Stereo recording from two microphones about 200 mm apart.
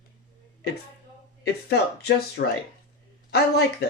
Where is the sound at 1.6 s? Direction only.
55° left (ahead or behind).